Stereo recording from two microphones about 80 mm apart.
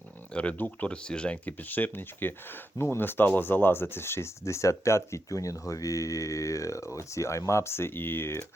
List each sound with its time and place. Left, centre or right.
0.3 s speech: centre